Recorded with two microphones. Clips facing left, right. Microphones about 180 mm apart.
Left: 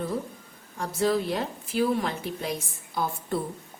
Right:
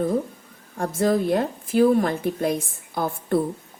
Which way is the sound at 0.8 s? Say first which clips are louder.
Right 4 dB; 50° right (ahead or behind).